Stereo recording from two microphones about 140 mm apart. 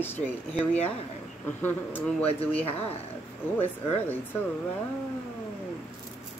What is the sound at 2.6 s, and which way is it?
Speech, 45° left (ahead or behind).